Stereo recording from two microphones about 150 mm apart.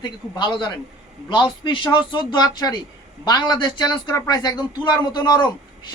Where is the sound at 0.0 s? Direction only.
30° left (ahead or behind).